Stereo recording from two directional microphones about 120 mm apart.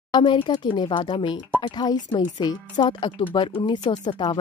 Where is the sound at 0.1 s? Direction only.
40° left (ahead or behind).